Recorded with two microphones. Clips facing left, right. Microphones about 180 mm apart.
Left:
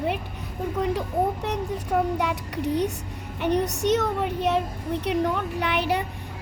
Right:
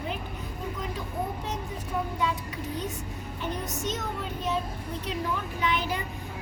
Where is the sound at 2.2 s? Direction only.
70° left (ahead or behind).